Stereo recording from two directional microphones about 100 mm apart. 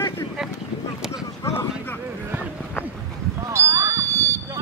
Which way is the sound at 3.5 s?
30° right (ahead or behind).